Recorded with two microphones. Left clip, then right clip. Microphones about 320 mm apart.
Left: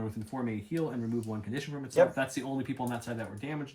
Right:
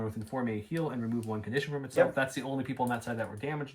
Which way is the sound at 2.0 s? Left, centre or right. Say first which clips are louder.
Left 2 dB; centre.